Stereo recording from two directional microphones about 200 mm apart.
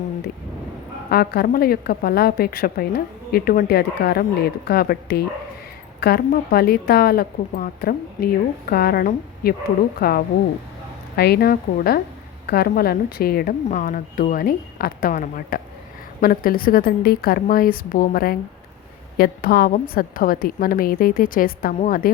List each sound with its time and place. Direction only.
1.1 s a woman's voice: 50° left (ahead or behind)